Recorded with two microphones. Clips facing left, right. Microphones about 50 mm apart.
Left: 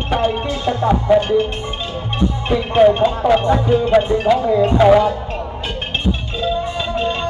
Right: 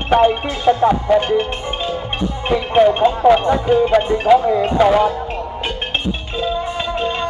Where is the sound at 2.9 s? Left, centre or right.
Centre.